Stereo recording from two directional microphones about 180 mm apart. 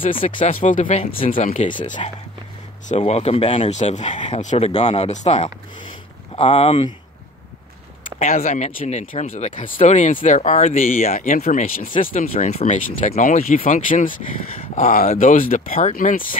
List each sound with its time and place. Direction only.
0.0 s speech: 45° left (ahead or behind)
8.2 s speech: 50° left (ahead or behind)